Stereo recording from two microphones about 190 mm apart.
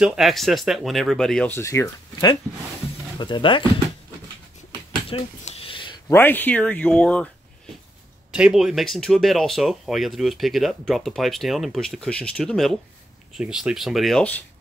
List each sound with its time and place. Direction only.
0.0 s speech: 5° right (ahead or behind); by 3.6 s 25° left (ahead or behind)
5.1 s a sound: 30° left (ahead or behind)
6.1 s speech: 10° left (ahead or behind)
8.3 s speech: 5° right (ahead or behind)